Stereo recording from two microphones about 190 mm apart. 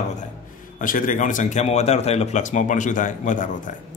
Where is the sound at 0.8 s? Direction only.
45° left (ahead or behind).